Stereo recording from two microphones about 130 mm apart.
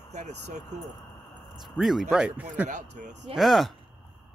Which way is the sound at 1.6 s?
Centre (ahead or behind).